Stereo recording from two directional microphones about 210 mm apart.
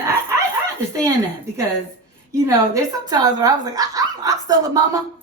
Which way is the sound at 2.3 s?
15° right (ahead or behind).